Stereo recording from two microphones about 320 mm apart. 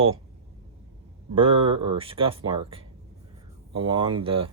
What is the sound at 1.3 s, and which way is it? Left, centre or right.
Speech, centre.